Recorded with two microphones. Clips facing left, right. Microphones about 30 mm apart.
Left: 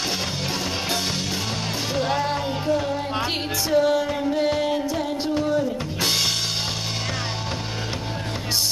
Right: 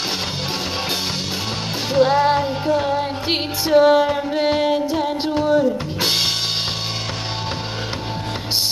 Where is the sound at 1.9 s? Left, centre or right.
Right.